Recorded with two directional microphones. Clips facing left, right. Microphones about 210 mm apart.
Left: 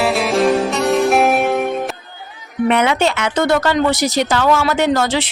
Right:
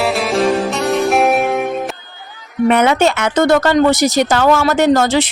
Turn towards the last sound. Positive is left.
turn(degrees=-45)  # may be behind; listen again after turning